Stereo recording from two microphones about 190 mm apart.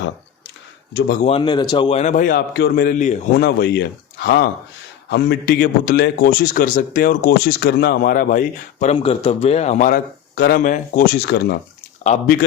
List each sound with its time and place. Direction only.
1.2 s a man's voice: 30° left (ahead or behind)
2.5 s a man's voice: 60° left (ahead or behind); by 3.4 s 45° left (ahead or behind)
3.4 s a man's voice: 60° left (ahead or behind); by 10.0 s 40° left (ahead or behind)
10.3 s a man's voice: 55° left (ahead or behind)